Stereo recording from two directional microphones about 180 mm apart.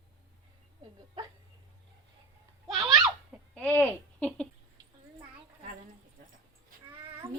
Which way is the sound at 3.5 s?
10° left (ahead or behind).